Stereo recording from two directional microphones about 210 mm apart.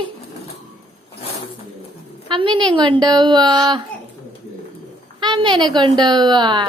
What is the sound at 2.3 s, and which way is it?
Speech, 25° right (ahead or behind).